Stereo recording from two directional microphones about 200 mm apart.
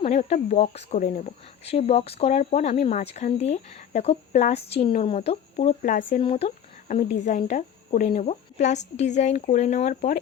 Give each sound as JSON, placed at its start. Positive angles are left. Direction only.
{"t": 0.0, "sound": "speech", "side_deg": 35}